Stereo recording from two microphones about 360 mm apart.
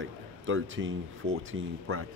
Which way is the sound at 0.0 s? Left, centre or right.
Right.